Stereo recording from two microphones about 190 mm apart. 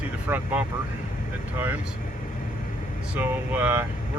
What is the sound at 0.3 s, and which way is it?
Speech, 10° right (ahead or behind).